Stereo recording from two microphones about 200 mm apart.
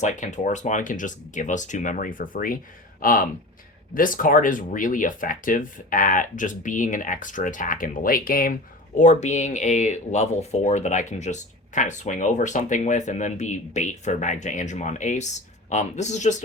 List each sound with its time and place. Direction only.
0.0 s speech: 35° left (ahead or behind)